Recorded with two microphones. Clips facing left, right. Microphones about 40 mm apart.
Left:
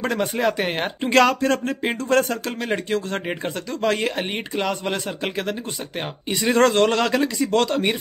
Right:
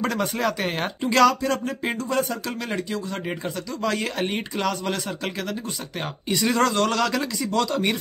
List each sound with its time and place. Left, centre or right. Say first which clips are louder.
0.0 s speech: left 2 dB; left
1.0 s a man's voice: left 1 dB; left
4.3 s speech: left 1 dB; centre
6.5 s a man's voice: left 6 dB; left
7.5 s speech: left 3 dB; left